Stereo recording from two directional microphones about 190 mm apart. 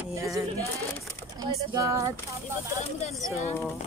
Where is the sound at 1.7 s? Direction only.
15° right (ahead or behind).